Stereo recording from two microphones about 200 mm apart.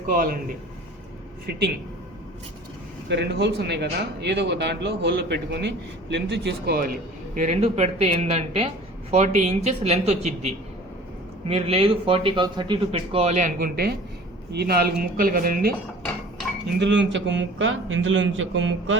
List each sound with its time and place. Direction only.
0.1 s speech: 45° right (ahead or behind)
1.5 s speech: 55° right (ahead or behind)
3.1 s speech: 55° right (ahead or behind)
7.3 s a man's voice: 35° right (ahead or behind)
16.8 s a man's voice: 65° right (ahead or behind)